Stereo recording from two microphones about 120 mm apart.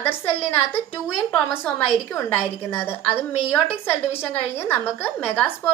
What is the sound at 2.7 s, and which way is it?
A woman's voice, 20° left (ahead or behind).